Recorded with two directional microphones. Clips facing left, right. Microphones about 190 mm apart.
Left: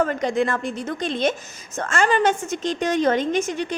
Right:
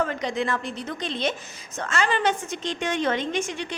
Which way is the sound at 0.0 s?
50° left (ahead or behind).